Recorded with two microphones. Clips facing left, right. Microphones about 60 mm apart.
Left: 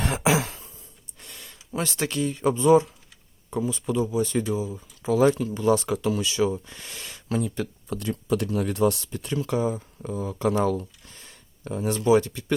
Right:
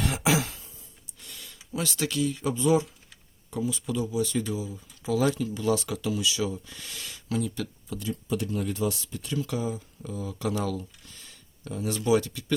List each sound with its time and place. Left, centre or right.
0.0 s throat clearing: left
1.2 s speech: left
7.9 s speech: left